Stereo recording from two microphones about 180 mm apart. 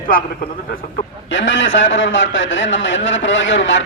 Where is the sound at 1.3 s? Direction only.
90° left.